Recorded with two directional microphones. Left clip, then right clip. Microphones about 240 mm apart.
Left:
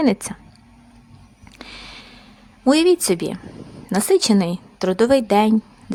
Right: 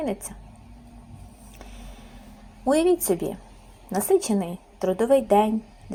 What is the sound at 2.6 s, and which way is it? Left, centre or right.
A woman's voice, left.